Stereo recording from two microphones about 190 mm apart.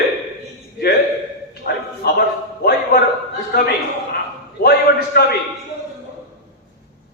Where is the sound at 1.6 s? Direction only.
55° left (ahead or behind).